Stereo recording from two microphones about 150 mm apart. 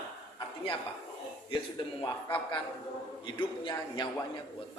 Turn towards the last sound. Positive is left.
turn(degrees=35)  # may be behind; listen again after turning